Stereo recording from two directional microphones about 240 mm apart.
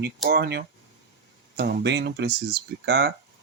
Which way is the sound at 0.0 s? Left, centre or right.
Right.